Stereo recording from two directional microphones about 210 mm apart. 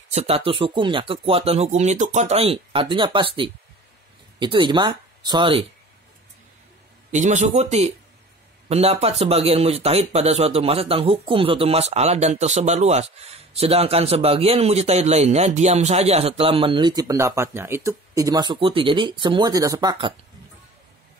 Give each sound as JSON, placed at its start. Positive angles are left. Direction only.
{"t": 0.1, "sound": "speech", "side_deg": -30}
{"t": 7.1, "sound": "a man's voice", "side_deg": -35}